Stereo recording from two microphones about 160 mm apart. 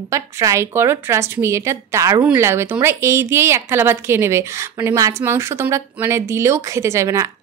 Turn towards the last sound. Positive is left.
turn(degrees=-20)  # may be behind; listen again after turning